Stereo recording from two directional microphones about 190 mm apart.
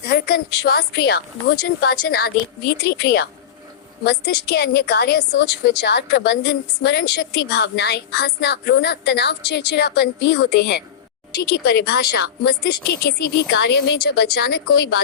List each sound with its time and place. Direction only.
0.1 s a woman's voice: 55° left (ahead or behind)